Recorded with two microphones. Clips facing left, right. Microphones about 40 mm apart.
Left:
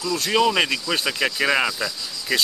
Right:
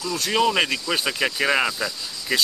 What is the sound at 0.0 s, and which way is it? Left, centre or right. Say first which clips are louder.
Speech: left 1 dB; centre.